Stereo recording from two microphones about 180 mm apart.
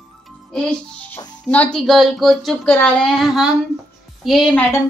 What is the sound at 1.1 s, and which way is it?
A woman's voice, 10° left (ahead or behind).